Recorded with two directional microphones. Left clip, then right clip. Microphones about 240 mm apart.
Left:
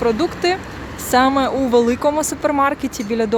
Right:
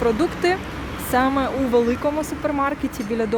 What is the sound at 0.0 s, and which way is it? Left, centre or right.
Speech, centre.